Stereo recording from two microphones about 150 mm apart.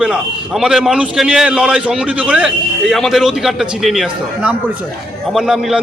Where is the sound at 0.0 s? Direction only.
5° right (ahead or behind).